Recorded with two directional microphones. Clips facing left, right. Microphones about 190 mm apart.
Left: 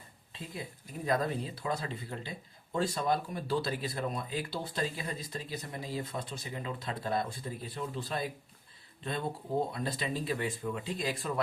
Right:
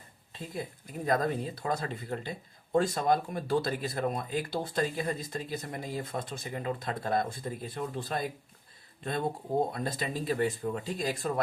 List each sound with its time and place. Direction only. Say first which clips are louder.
0.5 s speech: right 5 dB; 45° right (ahead or behind)
9.7 s speech: right 1 dB; 45° right (ahead or behind)